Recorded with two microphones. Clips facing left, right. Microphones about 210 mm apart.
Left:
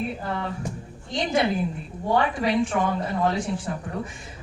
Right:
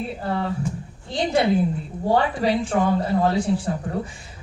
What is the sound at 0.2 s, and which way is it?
A woman's voice, 35° right (ahead or behind).